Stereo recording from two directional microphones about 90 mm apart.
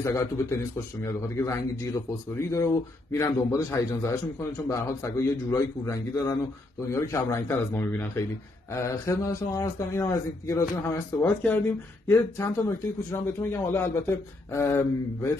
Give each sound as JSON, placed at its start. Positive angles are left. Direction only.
{"t": 0.0, "sound": "a man's voice", "side_deg": 35}